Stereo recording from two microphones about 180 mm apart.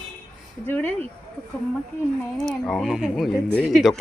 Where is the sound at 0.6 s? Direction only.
10° left (ahead or behind).